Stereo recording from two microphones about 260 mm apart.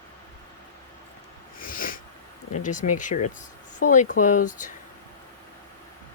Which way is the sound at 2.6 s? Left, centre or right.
Left.